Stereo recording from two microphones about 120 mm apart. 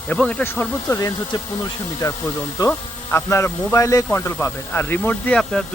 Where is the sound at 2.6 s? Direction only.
20° left (ahead or behind).